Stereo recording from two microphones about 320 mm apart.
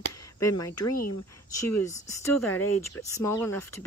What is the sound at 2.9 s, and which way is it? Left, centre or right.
Speech, centre.